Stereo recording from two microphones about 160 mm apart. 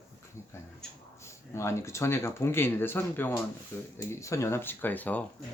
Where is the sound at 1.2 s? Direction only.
15° left (ahead or behind).